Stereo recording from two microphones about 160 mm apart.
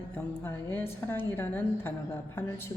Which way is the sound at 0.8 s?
15° left (ahead or behind).